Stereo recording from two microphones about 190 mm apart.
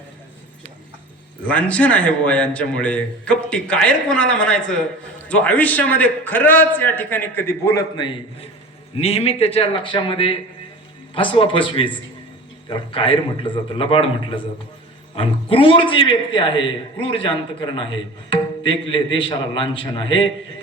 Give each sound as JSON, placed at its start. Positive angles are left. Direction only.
{"t": 1.5, "sound": "a man's voice", "side_deg": 10}